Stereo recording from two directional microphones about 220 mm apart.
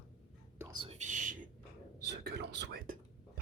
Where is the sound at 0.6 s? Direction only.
20° right (ahead or behind).